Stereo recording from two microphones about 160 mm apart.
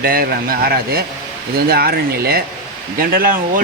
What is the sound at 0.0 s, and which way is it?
Speech, 70° right (ahead or behind).